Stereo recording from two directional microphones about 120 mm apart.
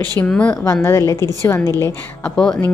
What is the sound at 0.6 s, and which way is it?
A woman's voice, 25° left (ahead or behind).